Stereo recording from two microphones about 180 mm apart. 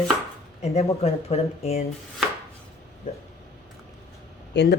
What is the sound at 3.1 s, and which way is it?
Speech, 45° left (ahead or behind).